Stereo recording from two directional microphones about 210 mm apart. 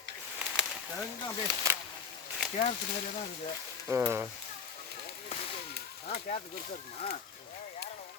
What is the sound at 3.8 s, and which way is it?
Speech, 10° right (ahead or behind).